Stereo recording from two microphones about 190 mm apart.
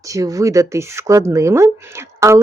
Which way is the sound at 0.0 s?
15° right (ahead or behind).